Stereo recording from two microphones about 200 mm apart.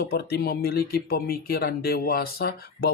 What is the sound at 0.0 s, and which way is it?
Speech, 55° left (ahead or behind).